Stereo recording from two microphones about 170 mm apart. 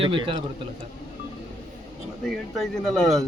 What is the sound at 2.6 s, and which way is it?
Speech, centre (ahead or behind).